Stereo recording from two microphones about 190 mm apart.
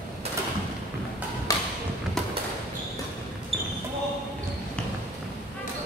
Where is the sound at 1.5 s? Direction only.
20° left (ahead or behind).